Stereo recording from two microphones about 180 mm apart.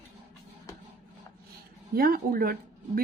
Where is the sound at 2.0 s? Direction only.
55° right (ahead or behind).